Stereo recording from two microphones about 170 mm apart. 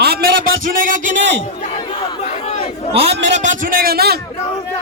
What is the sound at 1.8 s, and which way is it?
Crowd, 30° left (ahead or behind).